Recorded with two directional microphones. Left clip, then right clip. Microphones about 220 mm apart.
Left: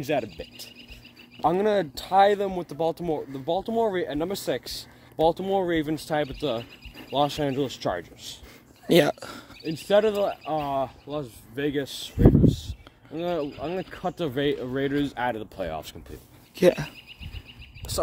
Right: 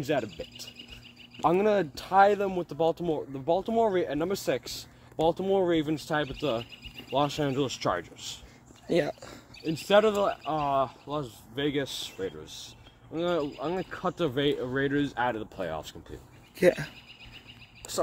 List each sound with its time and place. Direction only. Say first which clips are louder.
0.0 s speech: left 2 dB; 25° left (ahead or behind)
8.8 s a sound: left 7 dB; 50° left (ahead or behind)
9.6 s speech: left 1 dB; 10° left (ahead or behind)
17.9 s speech: left 2 dB; 35° left (ahead or behind)